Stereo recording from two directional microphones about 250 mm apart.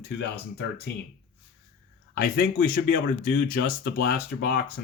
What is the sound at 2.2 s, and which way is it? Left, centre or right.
Speech, left.